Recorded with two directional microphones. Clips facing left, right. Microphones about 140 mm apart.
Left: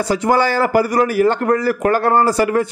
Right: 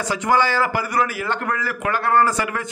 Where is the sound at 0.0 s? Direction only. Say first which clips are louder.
Left 4 dB; 35° left (ahead or behind).